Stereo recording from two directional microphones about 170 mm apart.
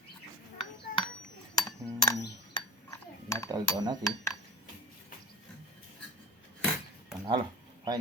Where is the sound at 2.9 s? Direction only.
15° left (ahead or behind).